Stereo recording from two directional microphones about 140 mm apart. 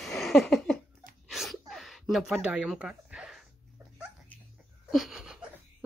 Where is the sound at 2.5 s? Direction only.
10° right (ahead or behind).